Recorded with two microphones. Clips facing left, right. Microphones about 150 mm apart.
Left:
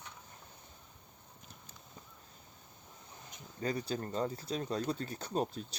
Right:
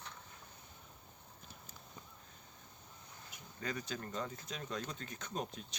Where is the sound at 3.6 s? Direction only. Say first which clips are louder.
Left 6 dB; 35° left (ahead or behind).